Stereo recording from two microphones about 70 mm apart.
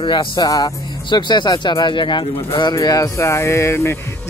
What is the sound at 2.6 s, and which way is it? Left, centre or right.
Speech, left.